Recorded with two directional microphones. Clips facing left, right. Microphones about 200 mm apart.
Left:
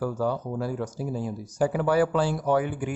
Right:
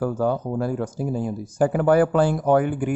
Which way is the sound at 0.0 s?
50° right (ahead or behind).